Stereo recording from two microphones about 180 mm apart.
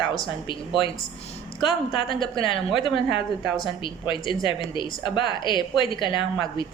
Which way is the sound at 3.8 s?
25° left (ahead or behind).